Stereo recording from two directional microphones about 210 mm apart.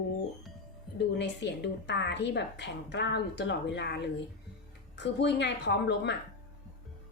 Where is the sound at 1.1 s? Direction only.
55° left (ahead or behind).